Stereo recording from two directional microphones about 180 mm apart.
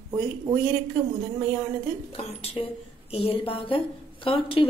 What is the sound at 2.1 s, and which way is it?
A woman's voice, 35° left (ahead or behind).